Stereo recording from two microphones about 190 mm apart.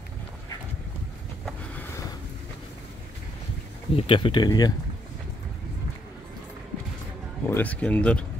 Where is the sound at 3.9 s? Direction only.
30° left (ahead or behind).